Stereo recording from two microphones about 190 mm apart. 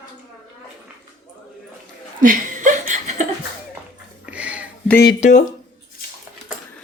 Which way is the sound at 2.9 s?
40° right (ahead or behind).